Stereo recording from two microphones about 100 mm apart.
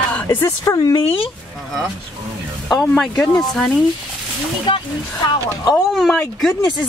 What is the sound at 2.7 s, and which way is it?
Speech, 5° left (ahead or behind).